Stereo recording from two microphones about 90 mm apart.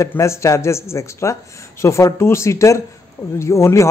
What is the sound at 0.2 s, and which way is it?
A man's voice, 35° left (ahead or behind).